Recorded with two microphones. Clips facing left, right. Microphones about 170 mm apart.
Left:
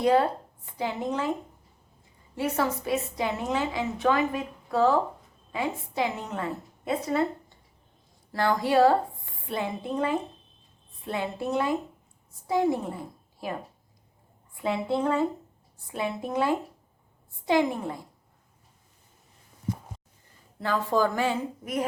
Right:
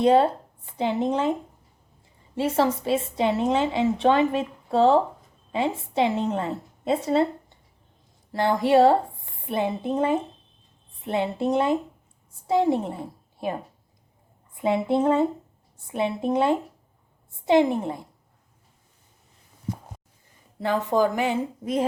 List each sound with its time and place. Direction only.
0.0 s speech: 25° right (ahead or behind)
2.3 s a woman's voice: 25° right (ahead or behind)
8.3 s a woman's voice: 25° right (ahead or behind)
14.5 s a woman's voice: 20° right (ahead or behind)
20.6 s a woman's voice: 20° right (ahead or behind)